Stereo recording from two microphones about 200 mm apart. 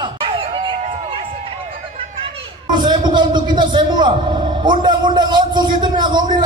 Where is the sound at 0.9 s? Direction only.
25° right (ahead or behind).